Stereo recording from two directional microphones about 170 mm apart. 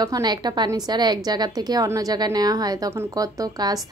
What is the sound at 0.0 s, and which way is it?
A woman's voice, 25° right (ahead or behind).